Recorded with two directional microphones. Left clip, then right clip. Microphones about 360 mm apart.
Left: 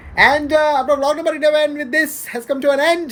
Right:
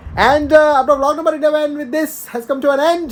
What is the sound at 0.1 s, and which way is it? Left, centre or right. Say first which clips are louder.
Speech: right 2 dB; centre.